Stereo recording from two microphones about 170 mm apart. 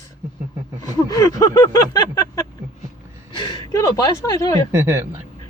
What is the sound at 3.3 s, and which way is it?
Speech, 25° left (ahead or behind).